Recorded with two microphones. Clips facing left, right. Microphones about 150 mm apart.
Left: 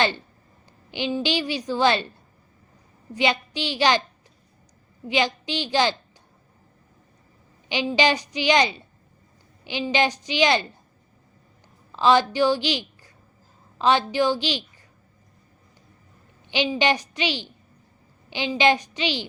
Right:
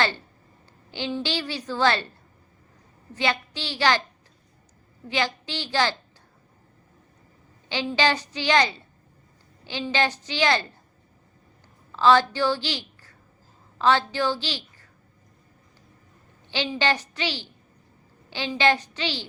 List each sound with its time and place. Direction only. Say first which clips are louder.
0.9 s a woman's voice: left 4 dB; 15° left (ahead or behind)
3.2 s a woman's voice: left 3 dB; 15° left (ahead or behind)
5.0 s a woman's voice: left 3 dB; 15° left (ahead or behind)
7.7 s a woman's voice: left 2 dB; 15° left (ahead or behind)
11.9 s a woman's voice: even; 15° left (ahead or behind)
16.5 s a woman's voice: left 3 dB; 15° left (ahead or behind)